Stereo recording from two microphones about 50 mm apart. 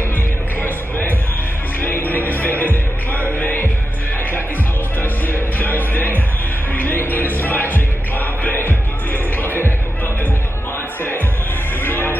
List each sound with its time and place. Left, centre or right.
0.6 s a sound: left
1.8 s music: left
5.0 s music: left
11.0 s music: left